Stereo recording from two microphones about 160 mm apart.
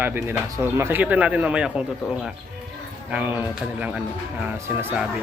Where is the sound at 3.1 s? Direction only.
5° right (ahead or behind).